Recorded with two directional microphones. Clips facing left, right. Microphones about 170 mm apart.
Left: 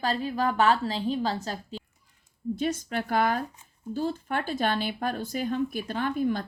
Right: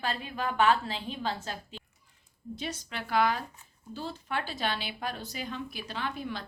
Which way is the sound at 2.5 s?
50° left (ahead or behind).